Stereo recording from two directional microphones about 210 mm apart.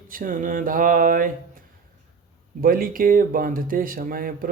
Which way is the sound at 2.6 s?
45° right (ahead or behind).